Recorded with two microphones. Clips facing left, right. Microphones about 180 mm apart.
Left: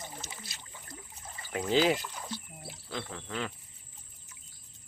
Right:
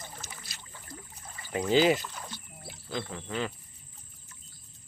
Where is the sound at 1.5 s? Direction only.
Centre (ahead or behind).